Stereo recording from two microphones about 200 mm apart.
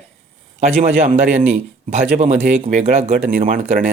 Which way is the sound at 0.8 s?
35° right (ahead or behind).